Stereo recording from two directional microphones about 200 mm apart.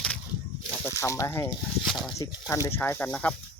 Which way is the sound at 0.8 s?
15° left (ahead or behind).